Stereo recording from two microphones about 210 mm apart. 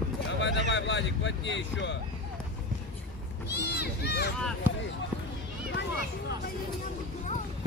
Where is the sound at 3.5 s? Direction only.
55° left (ahead or behind).